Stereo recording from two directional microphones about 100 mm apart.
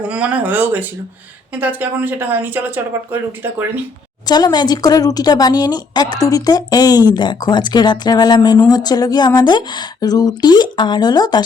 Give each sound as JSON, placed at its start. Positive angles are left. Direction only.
{"t": 0.0, "sound": "speech", "side_deg": -10}
{"t": 4.3, "sound": "a woman's voice", "side_deg": 45}